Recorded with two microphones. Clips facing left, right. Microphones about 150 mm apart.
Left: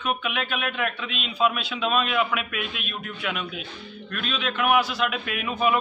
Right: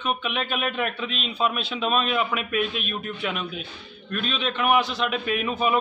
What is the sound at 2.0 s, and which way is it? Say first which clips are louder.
Speech: even; 35° right (ahead or behind).